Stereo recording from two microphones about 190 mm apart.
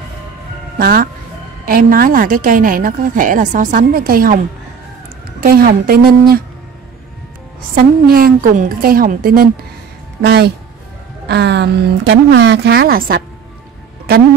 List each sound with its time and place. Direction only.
0.7 s a woman's voice: 50° right (ahead or behind)
5.4 s a woman's voice: 50° right (ahead or behind)
7.7 s a woman's voice: 50° right (ahead or behind)